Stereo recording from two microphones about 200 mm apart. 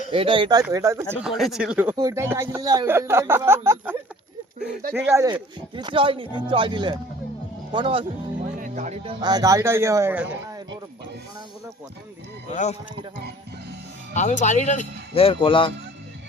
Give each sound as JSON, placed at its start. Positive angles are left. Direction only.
{"t": 0.1, "sound": "speech", "side_deg": -25}
{"t": 1.2, "sound": "speech", "side_deg": 0}
{"t": 4.9, "sound": "speech", "side_deg": -15}
{"t": 8.5, "sound": "speech", "side_deg": -40}
{"t": 9.2, "sound": "speech", "side_deg": -20}
{"t": 12.5, "sound": "speech", "side_deg": 35}
{"t": 14.1, "sound": "speech", "side_deg": 35}